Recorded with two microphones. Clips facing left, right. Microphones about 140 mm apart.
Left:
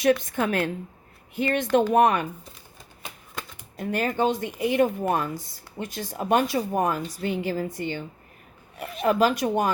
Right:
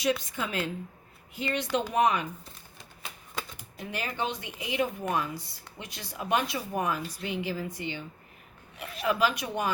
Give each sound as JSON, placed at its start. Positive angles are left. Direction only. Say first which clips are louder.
{"t": 0.0, "sound": "a woman's voice", "louder": "left 7 dB", "side_deg": 55}
{"t": 3.8, "sound": "speech", "louder": "left 9 dB", "side_deg": 45}